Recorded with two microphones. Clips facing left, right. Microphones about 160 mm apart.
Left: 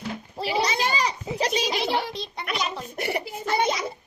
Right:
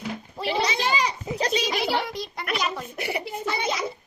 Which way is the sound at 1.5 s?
35° left (ahead or behind).